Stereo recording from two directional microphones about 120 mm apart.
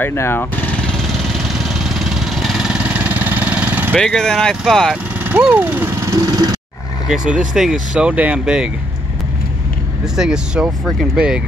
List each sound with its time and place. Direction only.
0.0 s speech: 20° left (ahead or behind)
1.4 s vehicle: 5° right (ahead or behind)
3.9 s speech: 5° left (ahead or behind)
5.3 s speech: 15° right (ahead or behind)
10.1 s speech: 5° right (ahead or behind)